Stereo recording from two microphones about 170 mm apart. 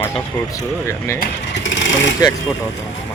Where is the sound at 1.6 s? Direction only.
90° left.